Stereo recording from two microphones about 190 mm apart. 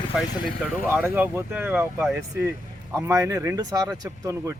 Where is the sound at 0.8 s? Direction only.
10° right (ahead or behind).